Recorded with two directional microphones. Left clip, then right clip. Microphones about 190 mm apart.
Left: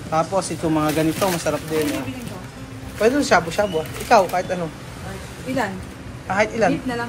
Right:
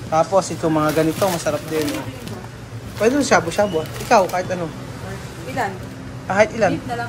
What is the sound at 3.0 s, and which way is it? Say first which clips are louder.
Speech: right 1 dB; 20° right (ahead or behind).